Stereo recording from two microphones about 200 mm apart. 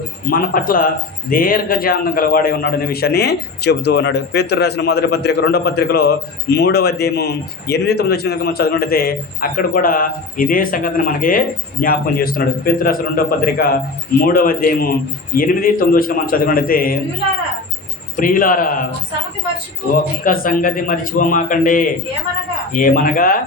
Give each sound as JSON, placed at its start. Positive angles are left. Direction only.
{"t": 0.3, "sound": "a man's voice", "side_deg": 45}
{"t": 18.2, "sound": "a man's voice", "side_deg": 45}
{"t": 20.2, "sound": "a man's voice", "side_deg": 45}